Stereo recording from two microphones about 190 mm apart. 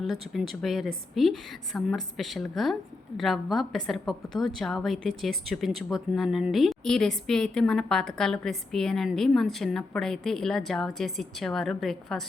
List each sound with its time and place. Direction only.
0.0 s a woman's voice: centre (ahead or behind)